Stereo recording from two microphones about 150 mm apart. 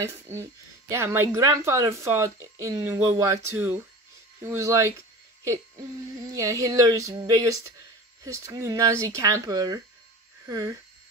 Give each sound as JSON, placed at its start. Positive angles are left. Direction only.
{"t": 0.1, "sound": "speech", "side_deg": -20}
{"t": 4.4, "sound": "a sound", "side_deg": -20}
{"t": 10.4, "sound": "speech", "side_deg": -20}